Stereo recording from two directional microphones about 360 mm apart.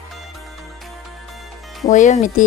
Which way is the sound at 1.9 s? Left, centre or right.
Centre.